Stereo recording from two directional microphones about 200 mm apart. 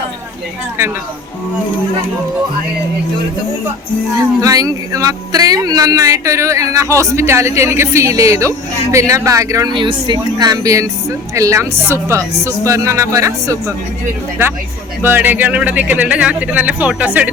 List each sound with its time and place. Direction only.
4.2 s speech: 15° right (ahead or behind)
15.0 s speech: 10° right (ahead or behind)